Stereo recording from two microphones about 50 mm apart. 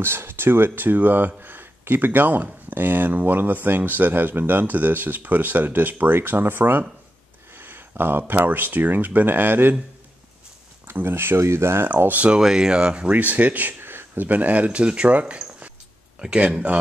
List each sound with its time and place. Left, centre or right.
0.0 s speech: right
10.9 s speech: right
11.9 s speech: right
12.4 s speech: centre
13.2 s speech: right